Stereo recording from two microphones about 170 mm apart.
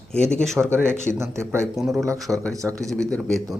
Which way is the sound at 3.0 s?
5° left (ahead or behind).